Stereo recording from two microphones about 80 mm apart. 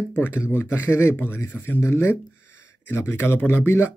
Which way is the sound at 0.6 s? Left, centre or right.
Left.